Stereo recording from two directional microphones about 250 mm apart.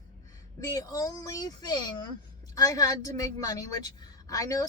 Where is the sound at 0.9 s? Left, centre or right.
Centre.